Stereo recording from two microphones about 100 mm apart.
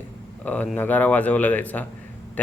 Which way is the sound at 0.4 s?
15° left (ahead or behind).